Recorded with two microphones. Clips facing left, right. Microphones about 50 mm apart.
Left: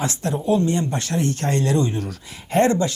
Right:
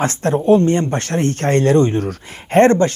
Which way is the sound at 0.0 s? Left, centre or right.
Right.